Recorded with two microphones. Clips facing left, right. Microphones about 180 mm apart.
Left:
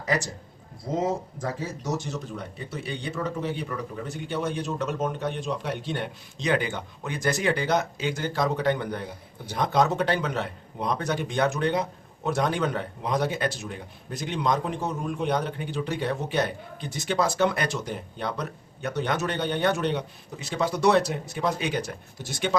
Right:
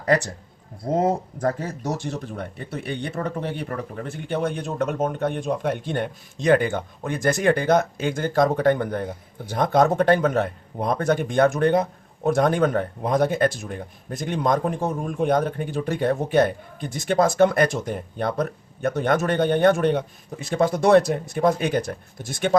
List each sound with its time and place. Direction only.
0.0 s speech: 60° right (ahead or behind)
1.4 s a man's voice: 60° right (ahead or behind)